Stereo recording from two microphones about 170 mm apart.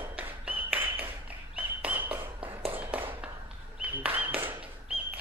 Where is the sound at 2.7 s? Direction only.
10° right (ahead or behind).